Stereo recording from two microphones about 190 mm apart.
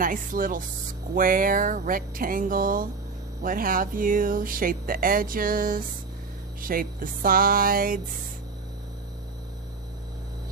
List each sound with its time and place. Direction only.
0.0 s speech: 45° right (ahead or behind)